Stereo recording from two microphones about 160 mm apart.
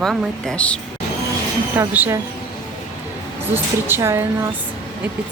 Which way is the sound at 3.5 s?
15° right (ahead or behind).